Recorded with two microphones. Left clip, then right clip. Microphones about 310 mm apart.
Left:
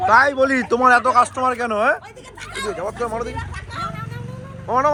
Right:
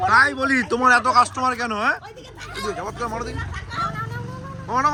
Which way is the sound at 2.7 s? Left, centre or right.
Centre.